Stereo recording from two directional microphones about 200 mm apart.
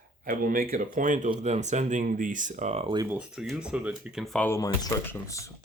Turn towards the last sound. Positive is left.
turn(degrees=15)  # may be behind; listen again after turning